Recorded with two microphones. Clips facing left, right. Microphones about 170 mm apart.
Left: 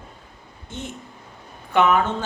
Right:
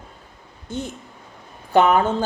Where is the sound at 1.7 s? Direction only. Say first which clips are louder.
Right 2 dB; 35° right (ahead or behind).